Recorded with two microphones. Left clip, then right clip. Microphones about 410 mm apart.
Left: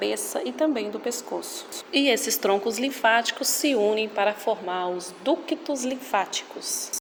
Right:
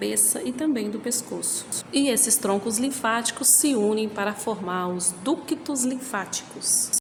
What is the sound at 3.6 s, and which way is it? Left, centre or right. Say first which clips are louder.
Speech: left 3 dB; right.